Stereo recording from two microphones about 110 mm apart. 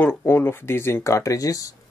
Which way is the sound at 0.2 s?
20° left (ahead or behind).